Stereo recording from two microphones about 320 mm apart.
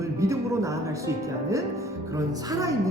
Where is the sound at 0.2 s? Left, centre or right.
Centre.